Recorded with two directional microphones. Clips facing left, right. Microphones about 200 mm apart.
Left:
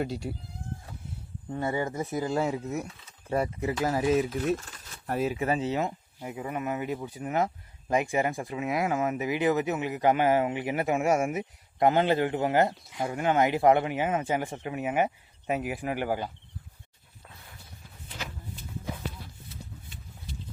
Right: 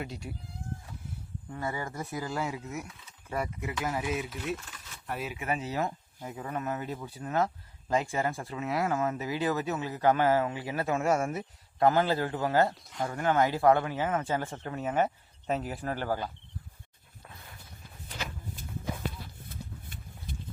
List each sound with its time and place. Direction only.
0.0 s speech: 35° left (ahead or behind)
1.5 s speech: 25° left (ahead or behind)
12.7 s speech: 5° left (ahead or behind)
13.1 s speech: 20° left (ahead or behind)
19.5 s a sound: 50° right (ahead or behind)